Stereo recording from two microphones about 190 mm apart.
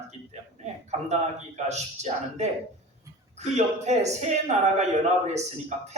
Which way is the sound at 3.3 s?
35° right (ahead or behind).